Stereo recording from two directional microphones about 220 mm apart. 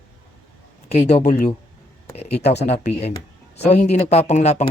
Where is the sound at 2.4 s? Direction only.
50° left (ahead or behind).